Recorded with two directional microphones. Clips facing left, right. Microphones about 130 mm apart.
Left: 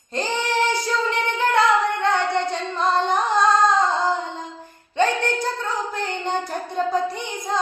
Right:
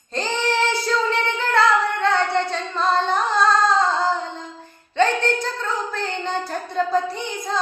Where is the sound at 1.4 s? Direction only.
15° left (ahead or behind).